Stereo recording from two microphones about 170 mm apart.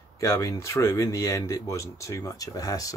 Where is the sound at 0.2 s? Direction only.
20° left (ahead or behind).